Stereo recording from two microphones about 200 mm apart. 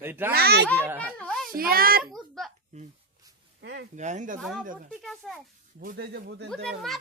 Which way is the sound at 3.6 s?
60° right (ahead or behind).